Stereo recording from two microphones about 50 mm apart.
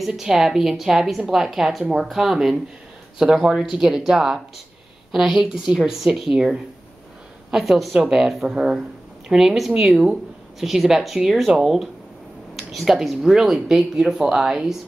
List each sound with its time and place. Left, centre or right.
0.0 s a woman's voice: centre